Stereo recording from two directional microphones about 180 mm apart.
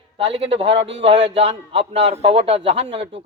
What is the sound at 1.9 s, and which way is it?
A man's voice, 35° right (ahead or behind).